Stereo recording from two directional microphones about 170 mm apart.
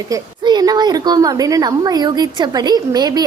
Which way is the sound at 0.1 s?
25° right (ahead or behind).